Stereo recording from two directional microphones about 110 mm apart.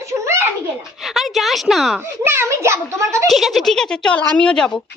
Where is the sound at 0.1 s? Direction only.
25° right (ahead or behind).